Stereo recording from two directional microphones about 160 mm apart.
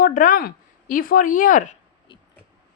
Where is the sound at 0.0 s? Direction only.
60° left (ahead or behind).